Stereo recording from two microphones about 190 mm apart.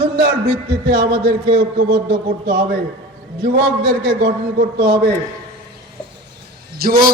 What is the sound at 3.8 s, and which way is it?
Speech, 50° right (ahead or behind).